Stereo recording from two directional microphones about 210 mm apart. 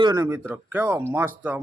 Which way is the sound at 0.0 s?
20° right (ahead or behind).